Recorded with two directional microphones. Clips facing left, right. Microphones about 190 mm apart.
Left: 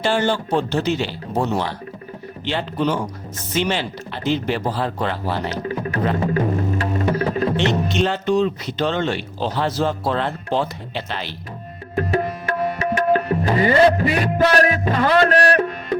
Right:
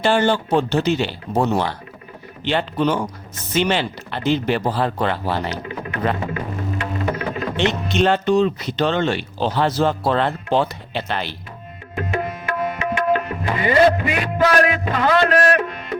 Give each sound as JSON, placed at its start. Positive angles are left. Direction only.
{"t": 0.0, "sound": "speech", "side_deg": -60}
{"t": 5.6, "sound": "music", "side_deg": 35}
{"t": 8.0, "sound": "speech", "side_deg": -65}
{"t": 11.9, "sound": "music", "side_deg": 35}